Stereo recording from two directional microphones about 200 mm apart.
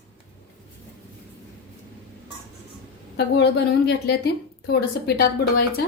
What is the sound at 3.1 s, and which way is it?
A woman's voice, 55° left (ahead or behind).